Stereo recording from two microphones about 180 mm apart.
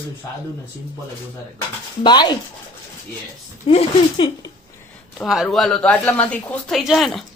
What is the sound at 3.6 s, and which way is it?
Speech, 30° left (ahead or behind).